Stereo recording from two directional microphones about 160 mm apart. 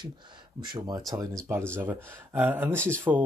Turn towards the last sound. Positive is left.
turn(degrees=5)  # may be behind; listen again after turning